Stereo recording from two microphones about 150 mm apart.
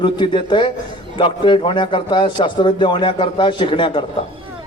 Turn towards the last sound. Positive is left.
turn(degrees=35)  # may be behind; listen again after turning